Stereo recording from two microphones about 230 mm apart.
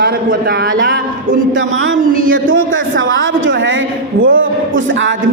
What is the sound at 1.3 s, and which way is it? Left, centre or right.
A woman's voice, right.